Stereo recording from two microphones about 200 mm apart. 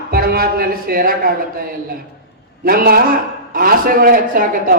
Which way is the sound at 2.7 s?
50° right (ahead or behind).